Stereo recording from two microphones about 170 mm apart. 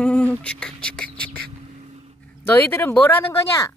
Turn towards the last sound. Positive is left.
turn(degrees=15)  # may be behind; listen again after turning